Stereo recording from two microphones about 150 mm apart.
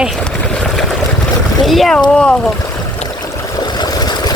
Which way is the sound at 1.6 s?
Centre (ahead or behind).